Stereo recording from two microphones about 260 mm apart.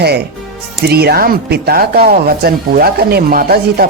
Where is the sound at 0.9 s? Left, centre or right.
Right.